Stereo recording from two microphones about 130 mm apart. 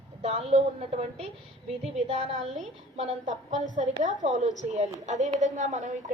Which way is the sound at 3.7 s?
75° right (ahead or behind).